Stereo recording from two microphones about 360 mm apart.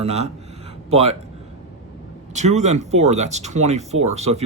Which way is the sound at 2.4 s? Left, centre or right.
Centre.